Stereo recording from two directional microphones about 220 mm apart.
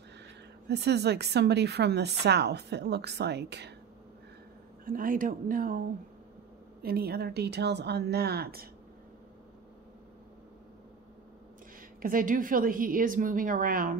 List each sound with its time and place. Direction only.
0.7 s a woman's voice: 50° right (ahead or behind)
4.8 s a woman's voice: 40° right (ahead or behind)
12.0 s a woman's voice: 40° right (ahead or behind)